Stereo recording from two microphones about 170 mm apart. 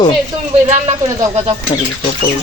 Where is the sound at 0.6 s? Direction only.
40° right (ahead or behind).